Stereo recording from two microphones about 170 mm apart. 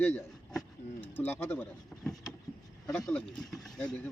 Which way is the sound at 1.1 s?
10° left (ahead or behind).